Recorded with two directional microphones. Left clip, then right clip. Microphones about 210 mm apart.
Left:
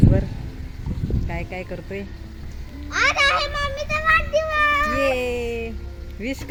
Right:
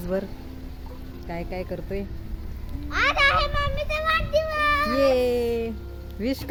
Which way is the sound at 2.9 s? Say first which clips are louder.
Left 2 dB; 55° left (ahead or behind).